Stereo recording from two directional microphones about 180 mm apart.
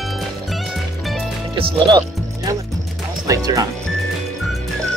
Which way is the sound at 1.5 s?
30° right (ahead or behind).